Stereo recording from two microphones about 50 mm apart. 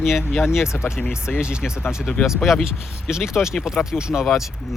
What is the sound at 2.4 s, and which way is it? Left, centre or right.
Speech, centre.